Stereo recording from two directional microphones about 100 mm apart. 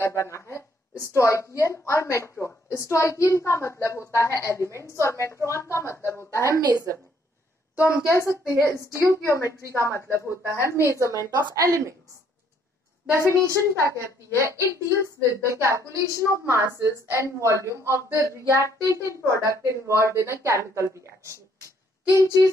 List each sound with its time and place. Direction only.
0.0 s a sound: 30° left (ahead or behind)
1.1 s a woman's voice: 30° left (ahead or behind)
7.8 s a woman's voice: 30° left (ahead or behind)
9.9 s a woman's voice: 25° right (ahead or behind)
13.3 s a woman's voice: 30° right (ahead or behind)